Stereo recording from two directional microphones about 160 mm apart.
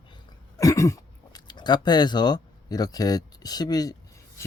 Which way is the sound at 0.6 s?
20° left (ahead or behind).